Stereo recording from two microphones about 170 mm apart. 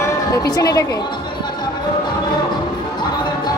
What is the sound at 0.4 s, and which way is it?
Speech, 20° left (ahead or behind).